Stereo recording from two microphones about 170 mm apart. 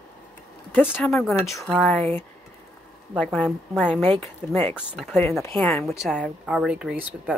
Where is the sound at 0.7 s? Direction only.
10° left (ahead or behind).